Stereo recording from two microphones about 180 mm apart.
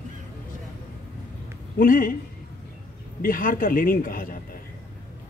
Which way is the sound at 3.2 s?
50° left (ahead or behind).